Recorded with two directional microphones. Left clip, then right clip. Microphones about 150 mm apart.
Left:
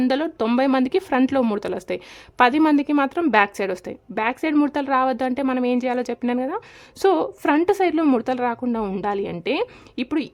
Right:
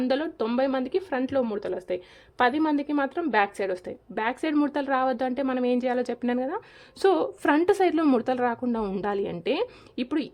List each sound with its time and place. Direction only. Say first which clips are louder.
0.0 s a woman's voice: left 5 dB; 35° left (ahead or behind); by 10.2 s 20° left (ahead or behind)